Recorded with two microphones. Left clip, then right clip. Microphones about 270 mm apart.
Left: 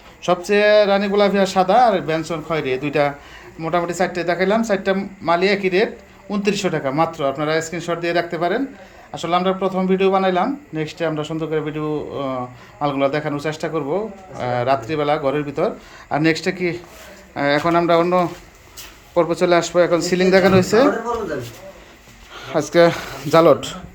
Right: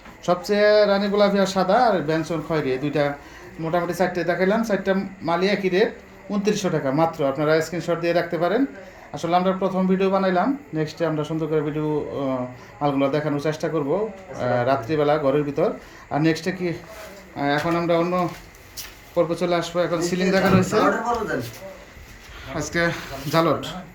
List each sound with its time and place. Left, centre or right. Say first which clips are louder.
0.2 s speech: left 3 dB; centre
22.4 s speech: left 10 dB; centre